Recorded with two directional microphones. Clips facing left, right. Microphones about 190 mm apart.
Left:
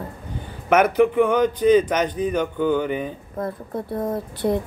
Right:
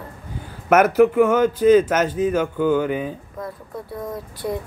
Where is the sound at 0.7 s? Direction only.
5° right (ahead or behind).